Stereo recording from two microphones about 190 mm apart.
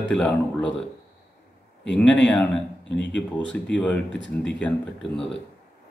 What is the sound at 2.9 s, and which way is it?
Speech, 70° left (ahead or behind).